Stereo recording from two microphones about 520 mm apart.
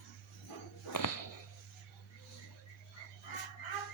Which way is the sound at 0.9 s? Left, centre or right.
Left.